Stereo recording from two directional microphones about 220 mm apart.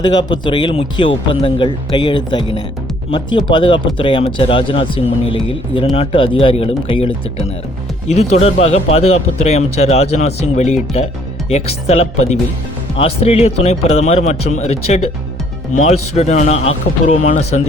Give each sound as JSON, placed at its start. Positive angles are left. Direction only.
{"t": 0.0, "sound": "speech", "side_deg": 20}